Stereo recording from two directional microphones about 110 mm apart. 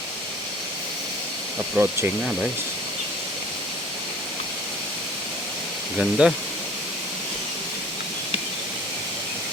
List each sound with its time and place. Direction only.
1.8 s speech: 15° right (ahead or behind)
6.0 s speech: 5° right (ahead or behind)